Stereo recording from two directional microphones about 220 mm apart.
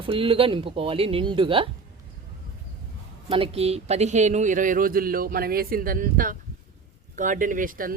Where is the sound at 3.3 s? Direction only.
25° right (ahead or behind).